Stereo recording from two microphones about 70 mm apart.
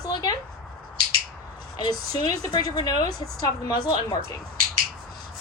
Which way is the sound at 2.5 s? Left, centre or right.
Left.